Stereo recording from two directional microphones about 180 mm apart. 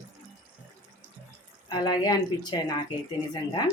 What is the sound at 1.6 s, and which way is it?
Speech, 20° left (ahead or behind).